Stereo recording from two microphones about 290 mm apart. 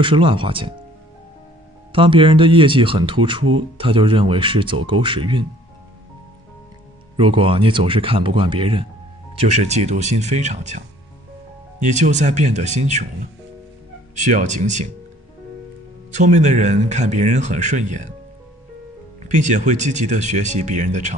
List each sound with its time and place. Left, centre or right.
0.0 s speech: centre
1.9 s speech: centre
7.2 s speech: centre
11.8 s speech: right
14.1 s speech: right
16.1 s speech: right
19.2 s speech: right